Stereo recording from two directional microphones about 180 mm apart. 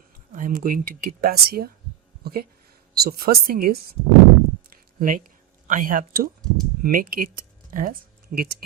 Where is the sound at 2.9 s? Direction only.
60° right (ahead or behind).